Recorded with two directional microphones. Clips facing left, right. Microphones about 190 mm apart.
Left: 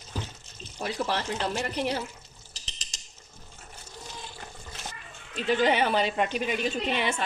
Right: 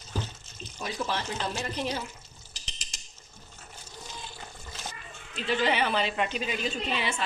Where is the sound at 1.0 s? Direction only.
65° left (ahead or behind).